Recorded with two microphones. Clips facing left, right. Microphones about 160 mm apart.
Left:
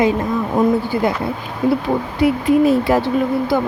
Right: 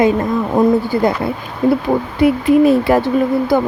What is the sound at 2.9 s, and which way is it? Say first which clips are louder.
Speech: right 3 dB; 60° right (ahead or behind).